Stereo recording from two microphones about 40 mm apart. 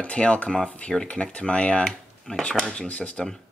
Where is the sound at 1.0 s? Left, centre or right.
Left.